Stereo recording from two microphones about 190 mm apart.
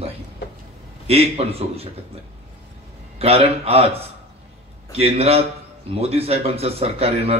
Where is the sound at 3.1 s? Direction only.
30° right (ahead or behind).